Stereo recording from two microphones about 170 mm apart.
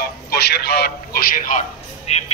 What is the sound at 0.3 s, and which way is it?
A man's voice, 70° left (ahead or behind).